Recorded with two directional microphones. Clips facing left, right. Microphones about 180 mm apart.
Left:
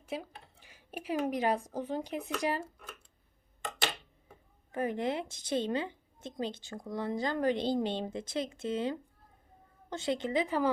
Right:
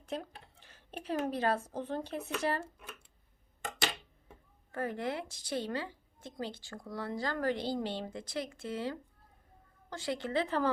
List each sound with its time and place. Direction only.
0.0 s speech: 5° left (ahead or behind)
4.7 s a woman's voice: 20° left (ahead or behind)